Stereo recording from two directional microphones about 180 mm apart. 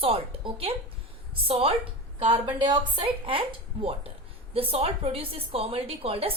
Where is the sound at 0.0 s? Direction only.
30° right (ahead or behind).